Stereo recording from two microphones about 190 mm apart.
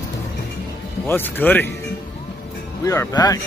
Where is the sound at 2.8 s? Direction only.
15° left (ahead or behind).